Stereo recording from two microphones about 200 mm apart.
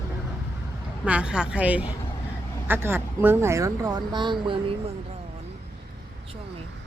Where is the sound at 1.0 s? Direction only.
5° right (ahead or behind); by 4.8 s 25° right (ahead or behind).